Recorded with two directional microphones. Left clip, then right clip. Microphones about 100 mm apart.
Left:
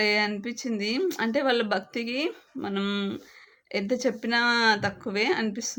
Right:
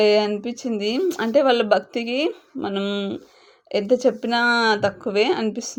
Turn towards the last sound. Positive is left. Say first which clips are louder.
# right 4 dB
turn(degrees=-20)  # may be behind; listen again after turning